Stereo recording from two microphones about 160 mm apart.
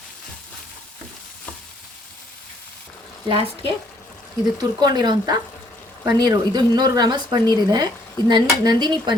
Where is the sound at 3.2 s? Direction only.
30° right (ahead or behind).